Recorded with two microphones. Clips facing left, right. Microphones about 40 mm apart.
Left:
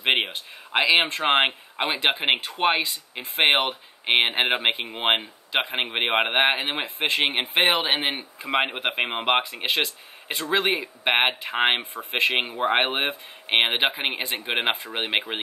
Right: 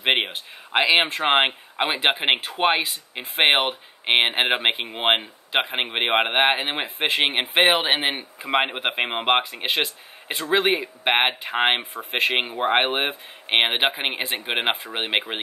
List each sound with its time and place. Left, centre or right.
0.0 s speech: centre